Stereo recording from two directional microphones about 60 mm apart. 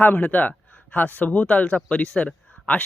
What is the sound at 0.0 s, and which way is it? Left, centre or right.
A man's voice, left.